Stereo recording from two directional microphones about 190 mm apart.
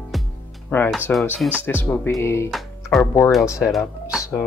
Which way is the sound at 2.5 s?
Centre (ahead or behind).